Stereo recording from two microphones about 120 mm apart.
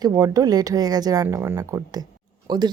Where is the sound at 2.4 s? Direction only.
35° right (ahead or behind).